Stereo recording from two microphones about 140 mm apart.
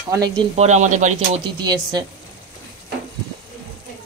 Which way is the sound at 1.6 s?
30° right (ahead or behind).